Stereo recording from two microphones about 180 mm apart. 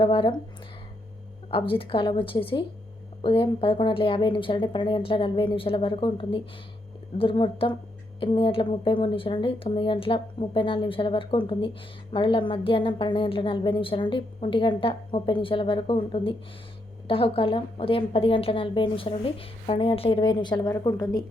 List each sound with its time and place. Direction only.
0.0 s speech: 25° left (ahead or behind)
1.5 s speech: 30° left (ahead or behind)